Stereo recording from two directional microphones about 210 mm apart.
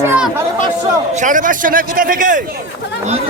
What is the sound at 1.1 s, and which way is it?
A man's voice, 35° right (ahead or behind).